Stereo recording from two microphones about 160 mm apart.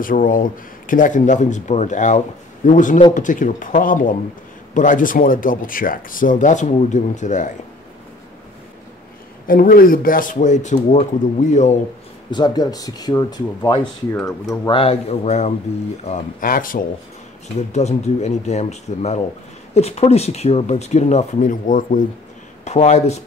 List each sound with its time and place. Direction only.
0.0 s speech: 60° left (ahead or behind)
9.5 s speech: 65° left (ahead or behind)
12.3 s speech: 30° left (ahead or behind)
14.7 s a man's voice: 35° left (ahead or behind)
16.3 s speech: 60° left (ahead or behind)
17.6 s speech: 45° left (ahead or behind)
22.7 s speech: 45° left (ahead or behind)